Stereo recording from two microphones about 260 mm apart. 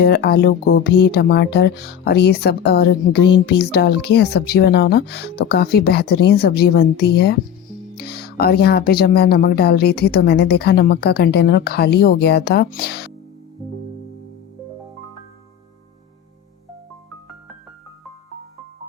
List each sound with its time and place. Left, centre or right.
0.0 s speech: left